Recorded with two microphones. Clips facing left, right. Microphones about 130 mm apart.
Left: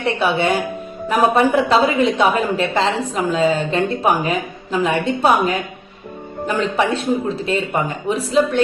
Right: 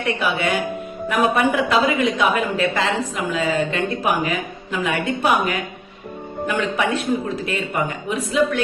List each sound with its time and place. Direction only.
0.2 s a woman's voice: 30° left (ahead or behind)